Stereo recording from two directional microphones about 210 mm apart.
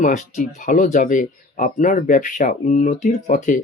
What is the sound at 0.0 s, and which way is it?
Speech, 35° left (ahead or behind).